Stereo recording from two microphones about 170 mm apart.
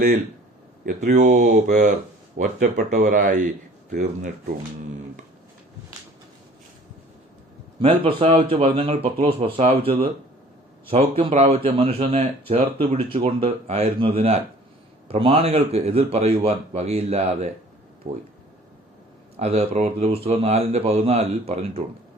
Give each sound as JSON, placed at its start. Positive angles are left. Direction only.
{"t": 0.9, "sound": "speech", "side_deg": -55}
{"t": 7.8, "sound": "a man's voice", "side_deg": -35}
{"t": 19.4, "sound": "a man's voice", "side_deg": -40}